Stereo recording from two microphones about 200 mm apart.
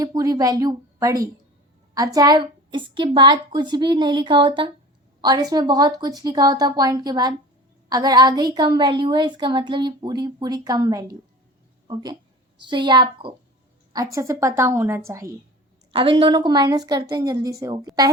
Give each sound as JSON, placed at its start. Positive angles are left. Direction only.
{"t": 0.0, "sound": "a woman's voice", "side_deg": -15}
{"t": 15.9, "sound": "a woman's voice", "side_deg": -25}